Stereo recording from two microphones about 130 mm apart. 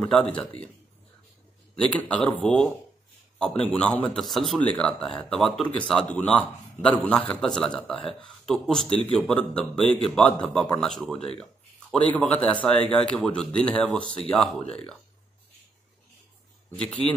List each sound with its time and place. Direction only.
0.0 s speech: 10° left (ahead or behind)
1.8 s a man's voice: 10° left (ahead or behind)
16.7 s speech: 10° left (ahead or behind)